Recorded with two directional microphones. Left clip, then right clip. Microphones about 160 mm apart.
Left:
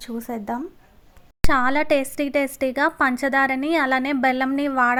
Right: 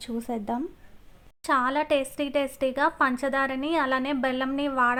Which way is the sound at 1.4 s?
30° left (ahead or behind).